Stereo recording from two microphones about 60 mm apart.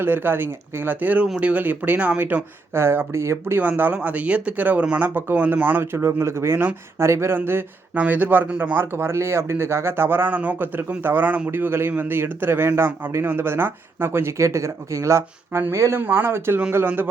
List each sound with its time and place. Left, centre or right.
0.0 s a man's voice: right
3.6 s a man's voice: right
5.8 s speech: right
7.9 s speech: right
8.7 s a man's voice: right
16.0 s a man's voice: right